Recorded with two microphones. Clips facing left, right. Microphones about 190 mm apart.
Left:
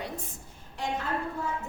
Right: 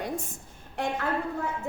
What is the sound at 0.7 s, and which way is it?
Speech, 55° right (ahead or behind).